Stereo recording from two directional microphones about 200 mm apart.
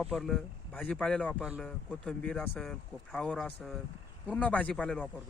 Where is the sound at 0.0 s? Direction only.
Centre (ahead or behind).